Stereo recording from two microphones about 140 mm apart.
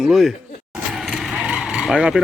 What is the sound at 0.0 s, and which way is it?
Speech, 5° right (ahead or behind).